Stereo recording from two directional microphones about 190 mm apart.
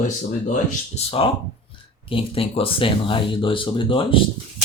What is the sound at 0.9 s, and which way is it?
Speech, 30° left (ahead or behind).